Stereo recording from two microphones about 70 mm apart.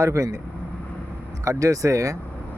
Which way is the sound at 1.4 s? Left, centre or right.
Right.